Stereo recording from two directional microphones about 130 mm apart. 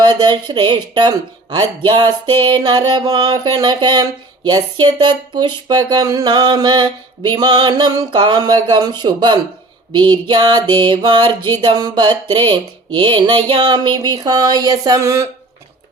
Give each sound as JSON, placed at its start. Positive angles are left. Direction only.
{"t": 0.0, "sound": "speech", "side_deg": -30}